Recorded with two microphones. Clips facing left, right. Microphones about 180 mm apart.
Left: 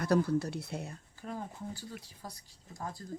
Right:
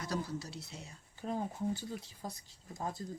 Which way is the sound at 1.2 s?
20° right (ahead or behind).